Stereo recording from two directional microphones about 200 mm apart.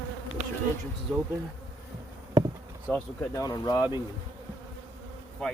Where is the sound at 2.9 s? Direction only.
10° left (ahead or behind).